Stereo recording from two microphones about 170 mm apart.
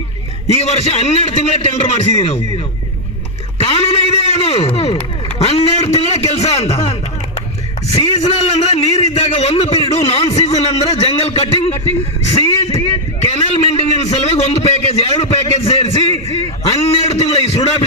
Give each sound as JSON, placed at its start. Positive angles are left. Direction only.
{"t": 0.4, "sound": "a man's voice", "side_deg": 40}
{"t": 3.6, "sound": "a man's voice", "side_deg": 35}
{"t": 7.9, "sound": "a man's voice", "side_deg": 40}